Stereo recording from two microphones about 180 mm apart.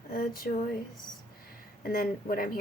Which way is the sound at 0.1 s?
55° left (ahead or behind).